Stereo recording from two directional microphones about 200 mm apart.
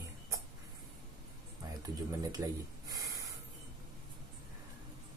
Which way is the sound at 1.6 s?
20° right (ahead or behind).